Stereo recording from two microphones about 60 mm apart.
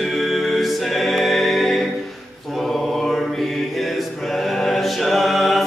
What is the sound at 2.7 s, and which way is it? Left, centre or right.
Mantra, centre.